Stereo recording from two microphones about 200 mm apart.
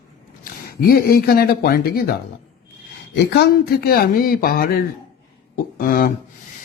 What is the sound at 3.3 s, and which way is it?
Speech, 55° left (ahead or behind).